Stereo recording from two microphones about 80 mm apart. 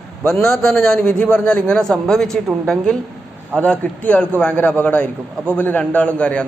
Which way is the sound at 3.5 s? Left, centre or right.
Centre.